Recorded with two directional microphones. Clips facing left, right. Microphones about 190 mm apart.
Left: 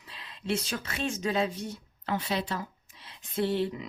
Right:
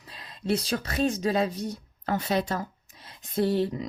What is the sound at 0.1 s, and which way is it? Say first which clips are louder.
Speech: right 4 dB; 40° right (ahead or behind).